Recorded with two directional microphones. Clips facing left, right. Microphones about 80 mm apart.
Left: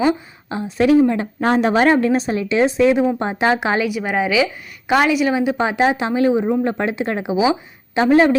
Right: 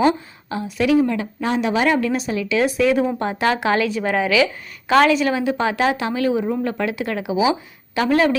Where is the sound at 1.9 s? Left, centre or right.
Left.